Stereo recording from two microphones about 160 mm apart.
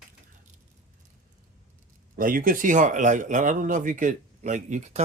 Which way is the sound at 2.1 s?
60° right (ahead or behind).